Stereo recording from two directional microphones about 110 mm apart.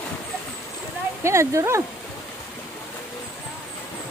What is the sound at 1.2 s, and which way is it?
Speech, 25° right (ahead or behind).